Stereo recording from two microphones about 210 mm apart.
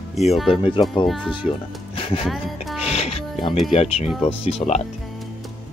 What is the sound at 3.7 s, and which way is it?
Speech, 25° left (ahead or behind).